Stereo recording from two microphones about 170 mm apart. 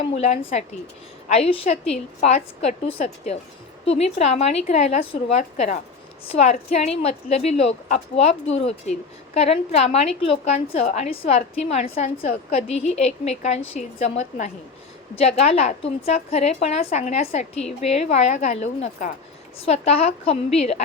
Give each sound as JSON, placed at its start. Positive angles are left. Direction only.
{"t": 0.2, "sound": "a woman's voice", "side_deg": 40}